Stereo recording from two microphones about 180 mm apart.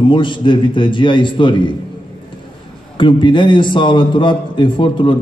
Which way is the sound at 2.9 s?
25° left (ahead or behind).